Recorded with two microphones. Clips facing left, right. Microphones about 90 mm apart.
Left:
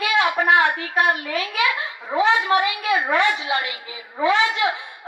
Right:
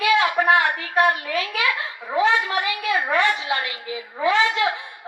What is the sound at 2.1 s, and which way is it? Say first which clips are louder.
A woman's voice: left 2 dB; 25° left (ahead or behind).